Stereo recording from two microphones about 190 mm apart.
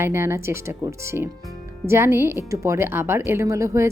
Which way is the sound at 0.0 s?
15° right (ahead or behind).